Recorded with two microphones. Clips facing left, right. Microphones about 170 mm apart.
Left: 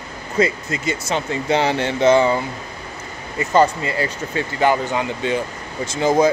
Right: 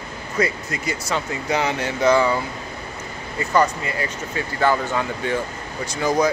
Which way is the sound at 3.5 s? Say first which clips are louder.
Left 4 dB; 25° left (ahead or behind).